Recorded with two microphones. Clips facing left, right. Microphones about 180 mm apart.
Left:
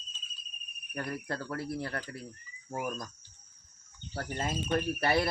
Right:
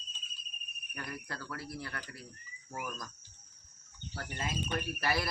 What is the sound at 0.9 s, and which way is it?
Speech, 40° left (ahead or behind).